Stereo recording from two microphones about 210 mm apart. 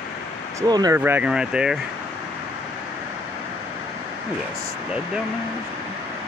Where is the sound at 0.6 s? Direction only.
20° right (ahead or behind).